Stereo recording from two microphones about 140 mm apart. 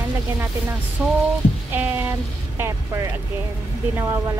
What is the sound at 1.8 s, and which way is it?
Speech, 15° right (ahead or behind).